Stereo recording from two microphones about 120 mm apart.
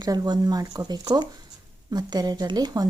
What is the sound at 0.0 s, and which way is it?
A woman's voice, 30° right (ahead or behind).